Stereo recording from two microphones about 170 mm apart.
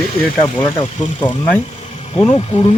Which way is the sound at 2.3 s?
40° left (ahead or behind).